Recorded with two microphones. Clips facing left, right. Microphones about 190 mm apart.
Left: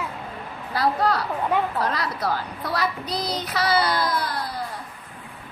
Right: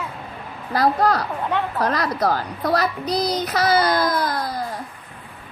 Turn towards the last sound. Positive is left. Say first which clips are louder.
# right 4 dB
turn(degrees=-40)  # may be behind; listen again after turning